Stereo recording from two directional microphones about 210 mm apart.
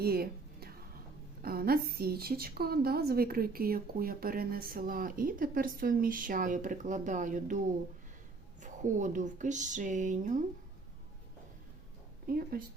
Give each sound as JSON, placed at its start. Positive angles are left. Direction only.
{"t": 0.0, "sound": "a sound", "side_deg": -45}
{"t": 1.4, "sound": "a woman's voice", "side_deg": -45}
{"t": 8.6, "sound": "speech", "side_deg": -35}
{"t": 12.3, "sound": "a woman's voice", "side_deg": -45}